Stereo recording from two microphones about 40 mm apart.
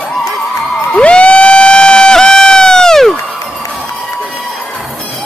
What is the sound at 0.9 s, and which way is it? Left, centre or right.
Crowd, left.